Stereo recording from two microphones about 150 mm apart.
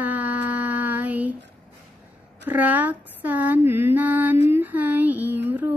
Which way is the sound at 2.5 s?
10° right (ahead or behind).